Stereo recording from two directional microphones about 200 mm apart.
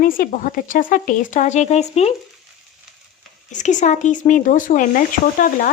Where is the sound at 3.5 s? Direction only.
40° left (ahead or behind).